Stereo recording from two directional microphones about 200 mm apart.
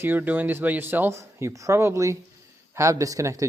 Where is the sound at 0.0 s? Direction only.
10° right (ahead or behind).